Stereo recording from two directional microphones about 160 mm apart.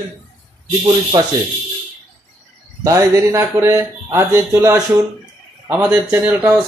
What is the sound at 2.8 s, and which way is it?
Speech, 15° right (ahead or behind).